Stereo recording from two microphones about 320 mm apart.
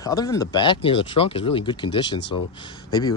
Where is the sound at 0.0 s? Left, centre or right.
Centre.